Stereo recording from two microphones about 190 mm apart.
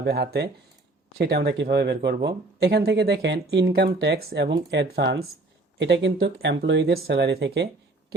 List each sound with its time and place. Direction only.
0.0 s speech: 55° right (ahead or behind)